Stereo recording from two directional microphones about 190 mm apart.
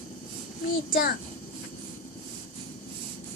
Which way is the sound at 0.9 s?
50° left (ahead or behind).